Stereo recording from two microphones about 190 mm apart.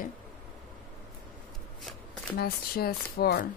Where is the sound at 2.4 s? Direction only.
55° left (ahead or behind).